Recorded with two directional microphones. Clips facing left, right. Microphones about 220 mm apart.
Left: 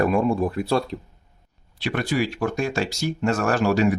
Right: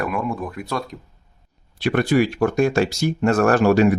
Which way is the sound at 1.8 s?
55° right (ahead or behind).